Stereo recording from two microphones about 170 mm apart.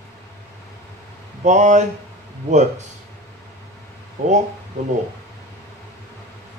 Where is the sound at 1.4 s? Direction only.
45° right (ahead or behind).